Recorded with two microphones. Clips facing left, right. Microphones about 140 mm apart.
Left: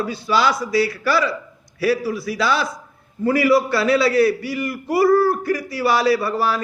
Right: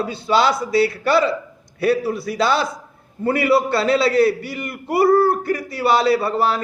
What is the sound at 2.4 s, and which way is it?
A man's voice, 25° right (ahead or behind).